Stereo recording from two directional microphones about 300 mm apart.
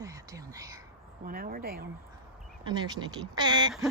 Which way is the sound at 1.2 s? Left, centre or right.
Right.